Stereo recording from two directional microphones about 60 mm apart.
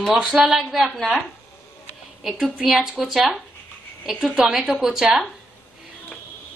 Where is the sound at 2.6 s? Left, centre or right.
Centre.